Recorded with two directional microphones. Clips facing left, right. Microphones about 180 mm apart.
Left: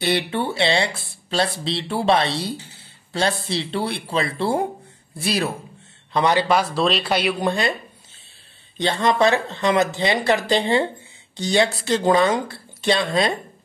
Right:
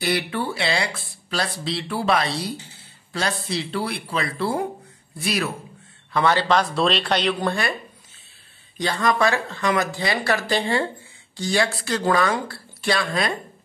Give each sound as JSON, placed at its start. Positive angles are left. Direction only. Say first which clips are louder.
{"t": 0.0, "sound": "speech", "louder": "left 2 dB", "side_deg": 25}
{"t": 6.1, "sound": "speech", "louder": "left 1 dB", "side_deg": 15}
{"t": 8.7, "sound": "speech", "louder": "left 2 dB", "side_deg": 25}